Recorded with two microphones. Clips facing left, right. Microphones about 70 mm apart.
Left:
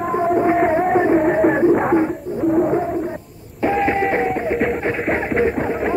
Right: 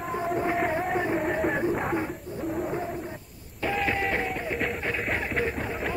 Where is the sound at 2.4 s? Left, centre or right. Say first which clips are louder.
Left 14 dB; left.